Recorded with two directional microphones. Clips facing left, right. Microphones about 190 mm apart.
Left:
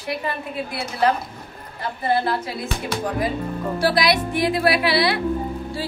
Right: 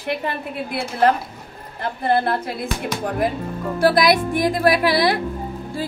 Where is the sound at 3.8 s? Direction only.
50° right (ahead or behind).